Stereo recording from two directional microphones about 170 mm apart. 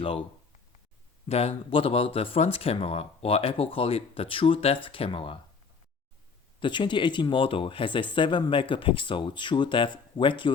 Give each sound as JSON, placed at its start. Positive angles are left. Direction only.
{"t": 1.3, "sound": "speech", "side_deg": 35}
{"t": 6.6, "sound": "speech", "side_deg": 25}